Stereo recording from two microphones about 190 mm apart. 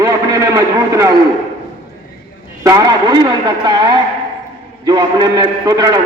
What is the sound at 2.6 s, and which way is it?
A man's voice, 20° right (ahead or behind).